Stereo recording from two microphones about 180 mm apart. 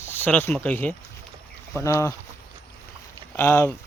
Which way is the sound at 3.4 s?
15° left (ahead or behind).